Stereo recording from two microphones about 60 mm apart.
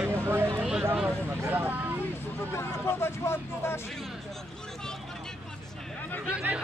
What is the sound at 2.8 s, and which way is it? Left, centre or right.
Speech, left.